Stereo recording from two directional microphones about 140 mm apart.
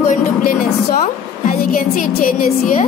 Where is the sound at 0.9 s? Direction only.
70° left (ahead or behind).